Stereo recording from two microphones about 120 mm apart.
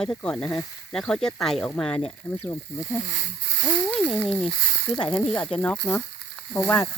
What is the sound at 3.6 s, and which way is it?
Speech, 20° left (ahead or behind).